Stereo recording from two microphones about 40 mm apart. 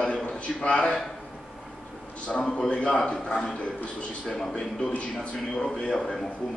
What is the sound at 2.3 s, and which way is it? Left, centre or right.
A man's voice, centre.